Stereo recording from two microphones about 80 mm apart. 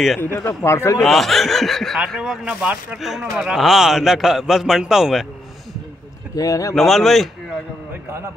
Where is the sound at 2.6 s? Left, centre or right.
Centre.